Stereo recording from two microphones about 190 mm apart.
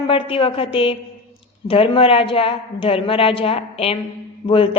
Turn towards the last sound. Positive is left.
turn(degrees=30)  # may be behind; listen again after turning